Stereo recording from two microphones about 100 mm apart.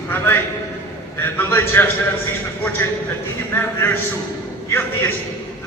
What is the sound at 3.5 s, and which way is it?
Speech, 20° left (ahead or behind).